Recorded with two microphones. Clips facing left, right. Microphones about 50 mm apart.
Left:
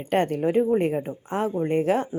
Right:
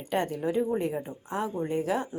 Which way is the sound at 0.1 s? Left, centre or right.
Left.